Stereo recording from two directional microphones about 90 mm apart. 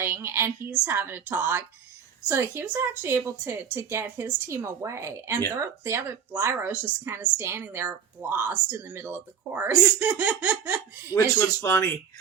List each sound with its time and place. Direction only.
0.0 s a woman's voice: 25° right (ahead or behind)
10.1 s laughter: 15° right (ahead or behind)
11.1 s speech: 30° left (ahead or behind)